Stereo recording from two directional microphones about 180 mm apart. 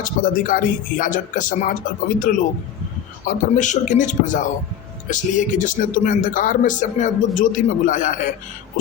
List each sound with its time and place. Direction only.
0.0 s speech: 50° left (ahead or behind)